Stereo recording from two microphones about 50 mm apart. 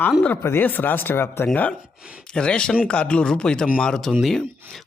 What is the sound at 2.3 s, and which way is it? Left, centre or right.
Speech, centre.